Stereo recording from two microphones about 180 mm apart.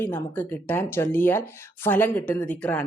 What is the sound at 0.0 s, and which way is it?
Speech, 10° left (ahead or behind).